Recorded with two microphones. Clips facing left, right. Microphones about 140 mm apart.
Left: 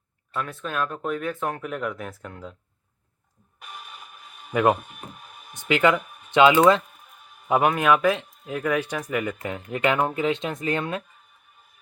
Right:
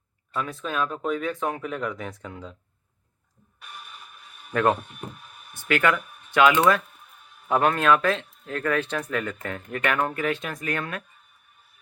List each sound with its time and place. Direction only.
0.3 s speech: centre (ahead or behind)
4.5 s speech: 10° left (ahead or behind)